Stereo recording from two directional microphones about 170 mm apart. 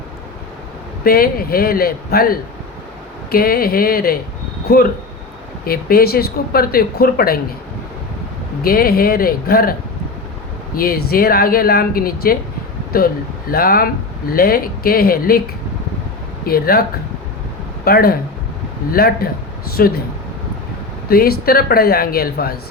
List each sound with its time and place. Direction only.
1.0 s speech: 60° left (ahead or behind)
8.6 s speech: 60° left (ahead or behind)
10.8 s speech: 60° left (ahead or behind)
16.5 s speech: 60° left (ahead or behind)
17.8 s speech: 60° left (ahead or behind)
21.1 s speech: 60° left (ahead or behind)